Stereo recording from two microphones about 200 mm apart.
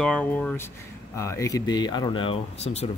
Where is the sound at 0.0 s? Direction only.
5° left (ahead or behind); by 2.9 s 30° left (ahead or behind).